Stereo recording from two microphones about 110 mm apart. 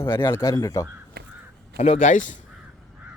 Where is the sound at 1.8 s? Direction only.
85° left.